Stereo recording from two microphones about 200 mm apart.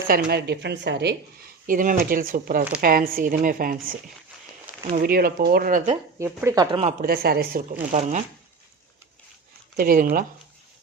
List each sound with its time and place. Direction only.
0.1 s a woman's voice: 50° right (ahead or behind)
1.6 s a woman's voice: 40° right (ahead or behind)
5.0 s a woman's voice: 50° right (ahead or behind)
6.1 s speech: 15° right (ahead or behind)
7.0 s a woman's voice: 50° right (ahead or behind)
7.9 s speech: 35° right (ahead or behind)
9.7 s a woman's voice: 45° right (ahead or behind)